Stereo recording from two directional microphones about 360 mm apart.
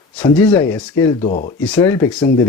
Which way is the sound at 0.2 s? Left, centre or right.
Centre.